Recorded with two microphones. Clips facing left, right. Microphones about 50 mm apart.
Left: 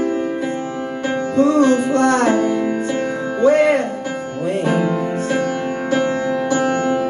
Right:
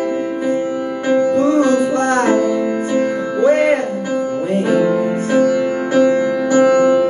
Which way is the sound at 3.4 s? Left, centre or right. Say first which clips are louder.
Even; right.